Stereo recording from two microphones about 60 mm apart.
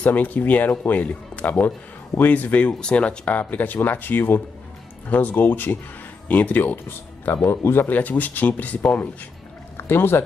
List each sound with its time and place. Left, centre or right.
0.0 s speech: left
9.8 s speech: left